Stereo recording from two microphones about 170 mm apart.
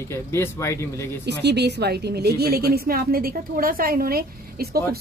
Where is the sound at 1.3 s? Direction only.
80° right.